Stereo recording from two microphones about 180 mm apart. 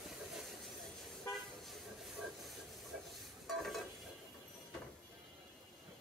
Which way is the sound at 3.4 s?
Centre (ahead or behind).